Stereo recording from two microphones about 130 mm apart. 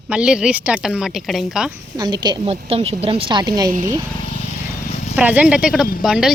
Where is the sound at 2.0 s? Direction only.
30° right (ahead or behind).